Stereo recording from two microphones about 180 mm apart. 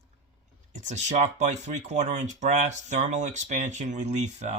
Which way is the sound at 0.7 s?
40° right (ahead or behind).